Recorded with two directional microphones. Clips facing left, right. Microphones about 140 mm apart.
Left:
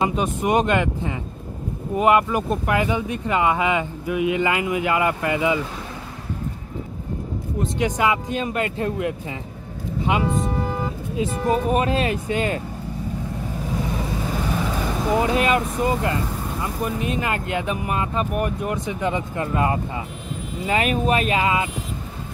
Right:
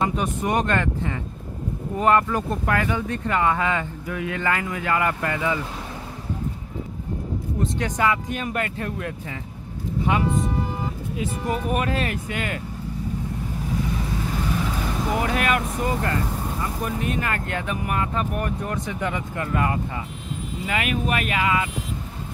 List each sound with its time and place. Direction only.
0.1 s speech: 20° left (ahead or behind)
7.7 s speech: 15° left (ahead or behind)
11.1 s speech: 25° left (ahead or behind)
15.1 s speech: 25° left (ahead or behind)